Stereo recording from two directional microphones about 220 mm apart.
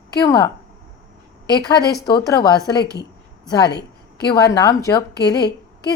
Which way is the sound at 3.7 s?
50° left (ahead or behind).